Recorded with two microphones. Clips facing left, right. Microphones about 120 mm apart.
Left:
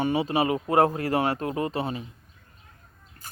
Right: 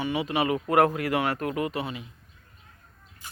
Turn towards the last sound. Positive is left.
turn(degrees=40)  # may be behind; listen again after turning